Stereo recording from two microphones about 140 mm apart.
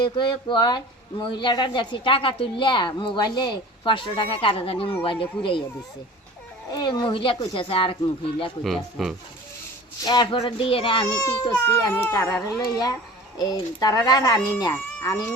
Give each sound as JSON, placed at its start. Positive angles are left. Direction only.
{"t": 0.0, "sound": "a woman's voice", "side_deg": 35}
{"t": 6.7, "sound": "a woman's voice", "side_deg": 25}
{"t": 8.6, "sound": "speech", "side_deg": 0}
{"t": 10.3, "sound": "a woman's voice", "side_deg": 40}
{"t": 11.5, "sound": "speech", "side_deg": 15}
{"t": 12.5, "sound": "speech", "side_deg": 30}